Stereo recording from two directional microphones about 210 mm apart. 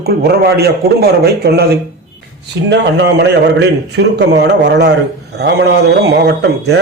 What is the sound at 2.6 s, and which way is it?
A man's voice, 55° right (ahead or behind).